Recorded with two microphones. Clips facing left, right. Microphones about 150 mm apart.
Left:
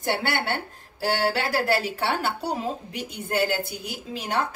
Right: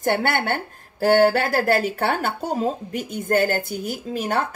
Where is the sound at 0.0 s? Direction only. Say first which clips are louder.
Right 5 dB; 50° right (ahead or behind).